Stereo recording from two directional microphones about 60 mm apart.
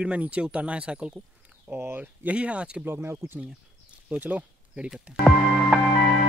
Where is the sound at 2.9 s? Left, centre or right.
Right.